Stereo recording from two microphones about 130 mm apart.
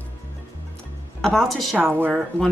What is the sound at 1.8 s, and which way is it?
Speech, 15° right (ahead or behind).